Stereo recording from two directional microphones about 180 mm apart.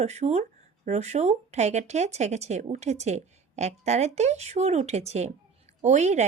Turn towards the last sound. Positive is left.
turn(degrees=-40)  # may be behind; listen again after turning